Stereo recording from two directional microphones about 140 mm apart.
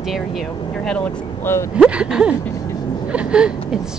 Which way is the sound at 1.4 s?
20° left (ahead or behind).